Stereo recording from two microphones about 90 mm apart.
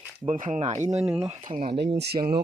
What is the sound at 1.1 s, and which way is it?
Speech, 85° right.